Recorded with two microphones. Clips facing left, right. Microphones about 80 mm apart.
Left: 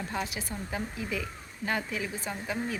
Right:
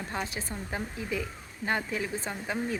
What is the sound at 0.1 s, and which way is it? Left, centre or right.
Speech, right.